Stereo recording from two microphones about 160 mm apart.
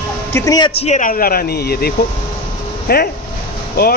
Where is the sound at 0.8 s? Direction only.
50° left (ahead or behind).